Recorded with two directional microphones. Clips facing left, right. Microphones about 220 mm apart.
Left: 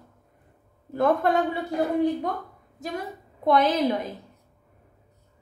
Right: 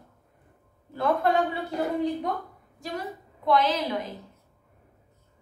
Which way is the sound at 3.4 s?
50° left (ahead or behind).